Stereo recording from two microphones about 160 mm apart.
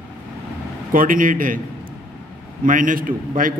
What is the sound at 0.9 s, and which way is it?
Speech, 60° right (ahead or behind).